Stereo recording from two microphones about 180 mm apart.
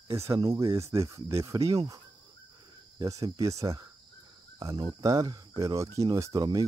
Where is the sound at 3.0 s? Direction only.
20° right (ahead or behind).